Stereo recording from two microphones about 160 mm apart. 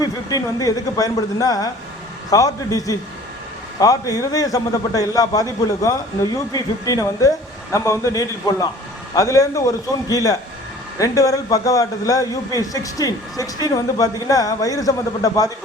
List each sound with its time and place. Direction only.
0.0 s a man's voice: 25° left (ahead or behind)